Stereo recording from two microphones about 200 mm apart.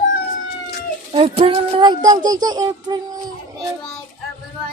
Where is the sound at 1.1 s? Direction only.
30° right (ahead or behind).